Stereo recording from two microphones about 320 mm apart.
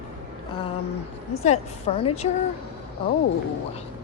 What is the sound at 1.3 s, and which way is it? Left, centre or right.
A woman's voice, left.